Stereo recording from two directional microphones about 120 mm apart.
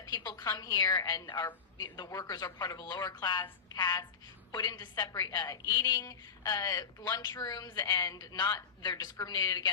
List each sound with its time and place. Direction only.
0.0 s a woman's voice: 35° left (ahead or behind)